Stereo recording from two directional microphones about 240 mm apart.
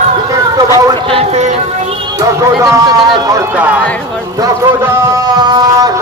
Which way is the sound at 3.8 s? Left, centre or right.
Centre.